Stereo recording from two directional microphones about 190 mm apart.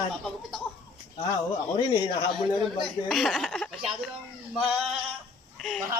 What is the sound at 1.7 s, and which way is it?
Speech, 25° left (ahead or behind).